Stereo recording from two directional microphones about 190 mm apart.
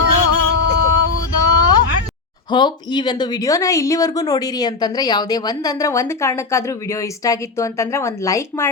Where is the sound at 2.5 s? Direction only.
25° left (ahead or behind).